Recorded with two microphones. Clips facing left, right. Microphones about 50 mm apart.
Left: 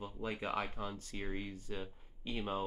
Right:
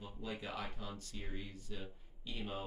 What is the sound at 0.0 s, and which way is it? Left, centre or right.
Speech, left.